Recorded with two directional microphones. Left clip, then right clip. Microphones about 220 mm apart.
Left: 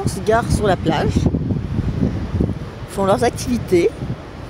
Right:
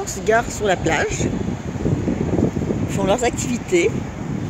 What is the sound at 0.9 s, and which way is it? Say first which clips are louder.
Speech: even; 15° left (ahead or behind).